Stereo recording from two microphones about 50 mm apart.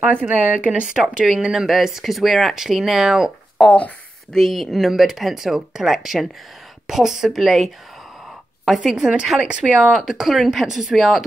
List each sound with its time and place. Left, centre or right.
0.2 s speech: right
0.9 s speech: centre
3.6 s a woman's voice: centre
8.9 s speech: centre
9.9 s speech: centre